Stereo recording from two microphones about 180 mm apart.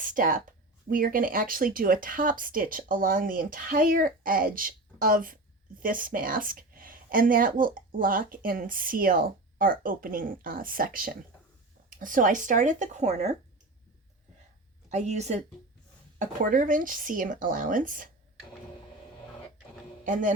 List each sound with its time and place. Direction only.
0.0 s a woman's voice: 45° right (ahead or behind)
14.8 s a woman's voice: 40° right (ahead or behind)